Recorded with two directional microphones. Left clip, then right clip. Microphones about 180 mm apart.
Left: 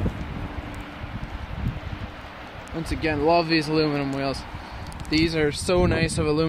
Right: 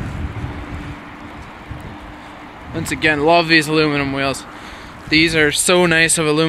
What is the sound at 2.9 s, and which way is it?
Speech, 5° right (ahead or behind).